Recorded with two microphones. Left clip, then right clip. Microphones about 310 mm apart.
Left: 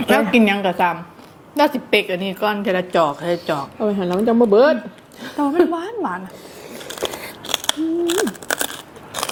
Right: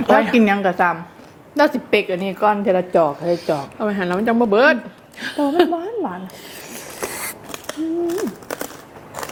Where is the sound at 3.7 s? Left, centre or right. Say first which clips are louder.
Left 1 dB; right.